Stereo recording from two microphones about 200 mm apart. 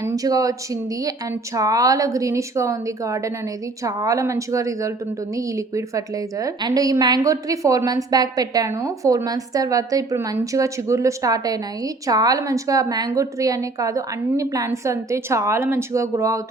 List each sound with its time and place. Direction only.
0.0 s a woman's voice: 15° right (ahead or behind)